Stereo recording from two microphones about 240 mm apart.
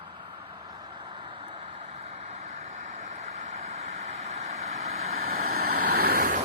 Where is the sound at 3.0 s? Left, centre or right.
Right.